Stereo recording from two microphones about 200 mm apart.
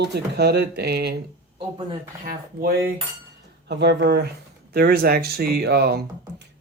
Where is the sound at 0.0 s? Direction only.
55° right (ahead or behind).